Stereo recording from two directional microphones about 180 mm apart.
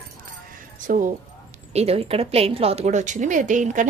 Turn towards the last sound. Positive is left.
turn(degrees=-45)  # may be behind; listen again after turning